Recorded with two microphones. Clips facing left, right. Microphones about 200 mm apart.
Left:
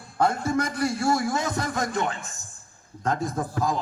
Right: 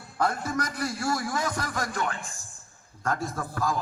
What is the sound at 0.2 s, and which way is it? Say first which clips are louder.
A man's voice: left 4 dB; 25° left (ahead or behind).